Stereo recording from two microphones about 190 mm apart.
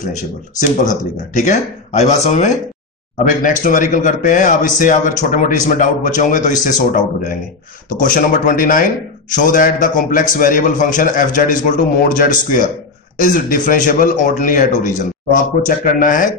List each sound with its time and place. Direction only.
0.1 s a man's voice: 40° left (ahead or behind)